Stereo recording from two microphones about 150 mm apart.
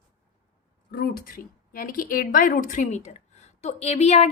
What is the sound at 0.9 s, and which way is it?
A woman's voice, 80° left.